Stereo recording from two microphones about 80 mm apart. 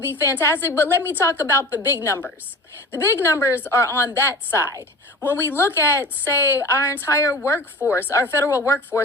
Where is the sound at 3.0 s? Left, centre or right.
Left.